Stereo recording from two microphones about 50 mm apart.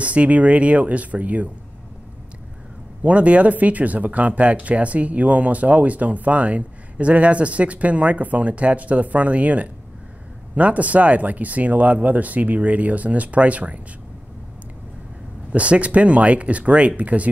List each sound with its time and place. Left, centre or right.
0.0 s speech: right
3.0 s speech: right
15.5 s speech: right